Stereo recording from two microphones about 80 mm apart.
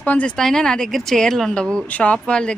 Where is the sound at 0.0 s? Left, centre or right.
Centre.